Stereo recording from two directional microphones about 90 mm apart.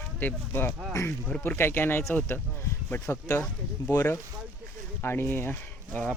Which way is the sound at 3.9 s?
35° left (ahead or behind).